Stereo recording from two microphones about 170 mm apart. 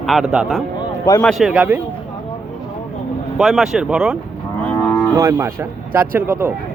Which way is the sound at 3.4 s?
Centre (ahead or behind).